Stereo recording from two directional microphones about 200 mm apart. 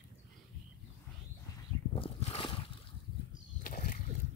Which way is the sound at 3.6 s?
45° left (ahead or behind).